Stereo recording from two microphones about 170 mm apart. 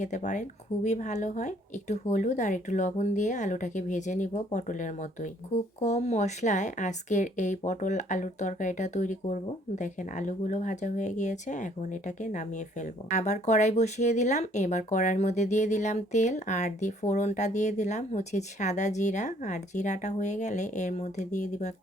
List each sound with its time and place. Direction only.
0.0 s speech: 45° left (ahead or behind)